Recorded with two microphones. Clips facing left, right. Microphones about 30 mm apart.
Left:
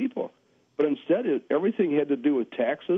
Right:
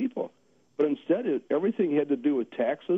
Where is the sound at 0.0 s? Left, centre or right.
Centre.